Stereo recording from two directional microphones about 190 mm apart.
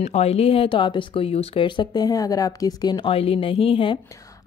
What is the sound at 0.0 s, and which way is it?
Speech, 35° left (ahead or behind).